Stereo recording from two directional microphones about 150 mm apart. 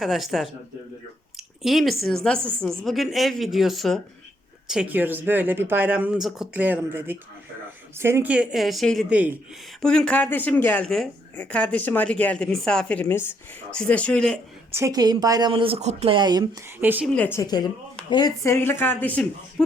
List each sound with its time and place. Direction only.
0.0 s speech: centre (ahead or behind)
4.7 s speech: 10° right (ahead or behind)
9.8 s speech: 5° left (ahead or behind)
14.7 s speech: 20° right (ahead or behind)
17.1 s speech: 10° left (ahead or behind)
17.4 s speech: 25° left (ahead or behind); by 19.6 s 10° left (ahead or behind)